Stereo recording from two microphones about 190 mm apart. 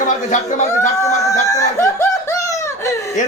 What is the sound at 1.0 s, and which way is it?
Laughter, 15° left (ahead or behind).